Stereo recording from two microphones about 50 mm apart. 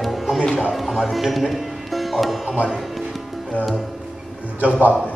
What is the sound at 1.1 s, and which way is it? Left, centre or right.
Speech, centre.